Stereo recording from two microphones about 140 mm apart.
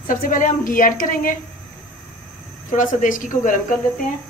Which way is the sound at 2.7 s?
65° left (ahead or behind).